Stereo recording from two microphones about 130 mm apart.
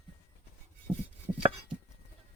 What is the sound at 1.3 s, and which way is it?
Chopping, 40° right (ahead or behind).